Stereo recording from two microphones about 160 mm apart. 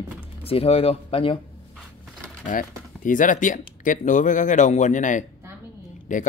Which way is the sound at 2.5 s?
55° left (ahead or behind).